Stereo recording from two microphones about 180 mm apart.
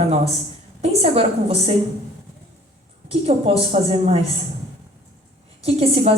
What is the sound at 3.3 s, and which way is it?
A woman's voice, 35° right (ahead or behind).